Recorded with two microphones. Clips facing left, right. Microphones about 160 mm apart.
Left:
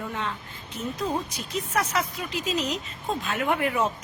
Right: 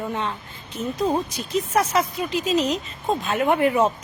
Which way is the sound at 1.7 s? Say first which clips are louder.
Right 5 dB; 25° right (ahead or behind).